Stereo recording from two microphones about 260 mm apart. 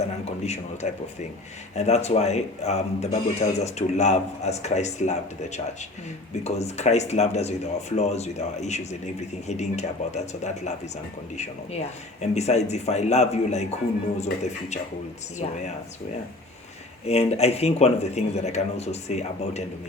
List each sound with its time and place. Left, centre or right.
0.4 s speech: left
6.4 s speech: left
17.1 s speech: left